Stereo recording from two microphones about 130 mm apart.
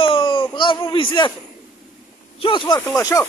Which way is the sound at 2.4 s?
40° left (ahead or behind).